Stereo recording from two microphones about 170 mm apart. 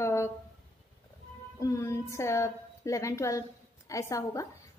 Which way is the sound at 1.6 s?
20° left (ahead or behind).